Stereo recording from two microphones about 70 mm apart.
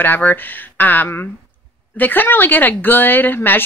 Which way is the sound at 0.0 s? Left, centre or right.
Left.